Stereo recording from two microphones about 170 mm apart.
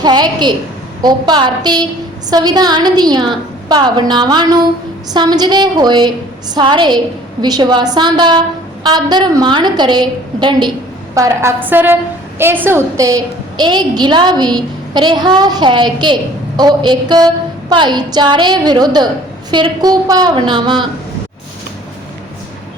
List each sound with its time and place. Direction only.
0.0 s a woman's voice: 25° right (ahead or behind)